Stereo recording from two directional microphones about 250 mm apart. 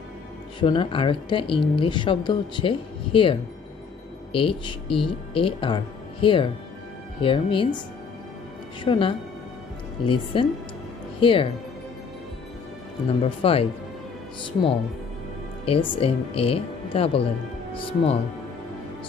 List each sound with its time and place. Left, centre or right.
0.6 s speech: centre
8.8 s speech: left
13.2 s speech: left
15.6 s speech: left